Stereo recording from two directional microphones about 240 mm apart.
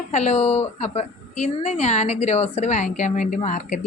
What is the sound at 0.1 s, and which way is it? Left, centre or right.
A woman's voice, left.